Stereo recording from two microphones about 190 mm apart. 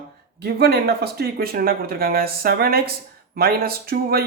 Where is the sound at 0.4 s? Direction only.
55° right (ahead or behind).